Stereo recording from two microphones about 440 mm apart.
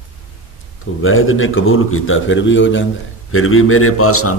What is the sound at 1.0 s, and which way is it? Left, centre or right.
A man's voice, left.